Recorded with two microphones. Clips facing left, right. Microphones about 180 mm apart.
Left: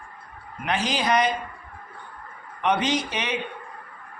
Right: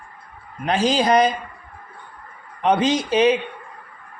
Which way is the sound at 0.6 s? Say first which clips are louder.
Right 6 dB; 35° right (ahead or behind).